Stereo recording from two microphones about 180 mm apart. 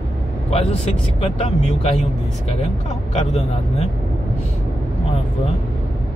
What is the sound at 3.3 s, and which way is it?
Speech, 35° left (ahead or behind).